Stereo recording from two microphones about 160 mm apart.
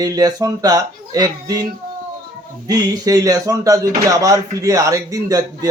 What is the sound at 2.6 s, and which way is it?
Speech, 25° right (ahead or behind).